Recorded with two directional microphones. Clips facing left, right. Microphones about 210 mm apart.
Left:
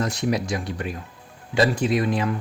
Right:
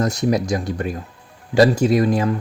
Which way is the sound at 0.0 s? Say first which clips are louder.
Right 5 dB; 40° right (ahead or behind).